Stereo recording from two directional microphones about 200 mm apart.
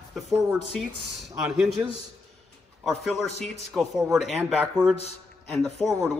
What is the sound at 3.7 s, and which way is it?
Speech, centre (ahead or behind).